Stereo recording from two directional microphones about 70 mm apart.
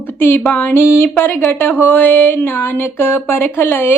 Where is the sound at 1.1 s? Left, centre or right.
Left.